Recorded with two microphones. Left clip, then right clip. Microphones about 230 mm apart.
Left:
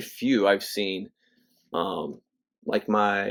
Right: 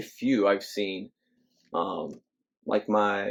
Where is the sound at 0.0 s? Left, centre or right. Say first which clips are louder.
Left 2 dB; left.